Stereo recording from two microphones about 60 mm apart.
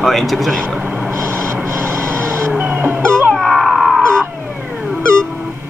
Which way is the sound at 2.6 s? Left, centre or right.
Right.